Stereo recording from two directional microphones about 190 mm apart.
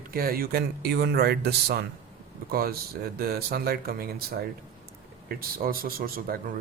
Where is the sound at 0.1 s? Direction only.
50° right (ahead or behind).